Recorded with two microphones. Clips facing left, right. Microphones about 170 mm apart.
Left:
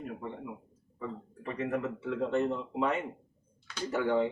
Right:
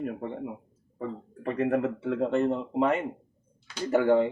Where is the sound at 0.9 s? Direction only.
55° right (ahead or behind).